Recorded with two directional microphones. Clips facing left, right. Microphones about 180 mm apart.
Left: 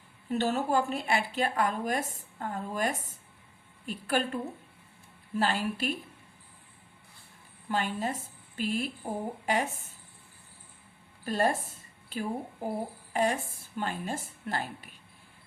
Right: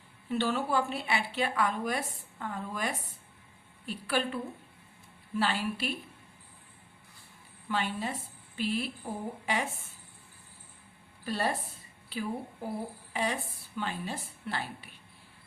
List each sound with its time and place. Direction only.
0.3 s a woman's voice: 40° left (ahead or behind)
5.4 s a woman's voice: 40° left (ahead or behind)
7.7 s a woman's voice: 45° left (ahead or behind)
11.3 s a woman's voice: 45° left (ahead or behind)